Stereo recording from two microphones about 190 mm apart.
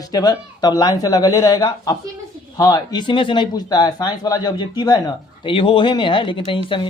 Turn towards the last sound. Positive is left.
turn(degrees=25)  # may be behind; listen again after turning